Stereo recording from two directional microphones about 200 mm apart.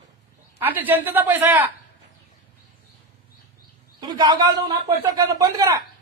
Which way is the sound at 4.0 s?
20° right (ahead or behind).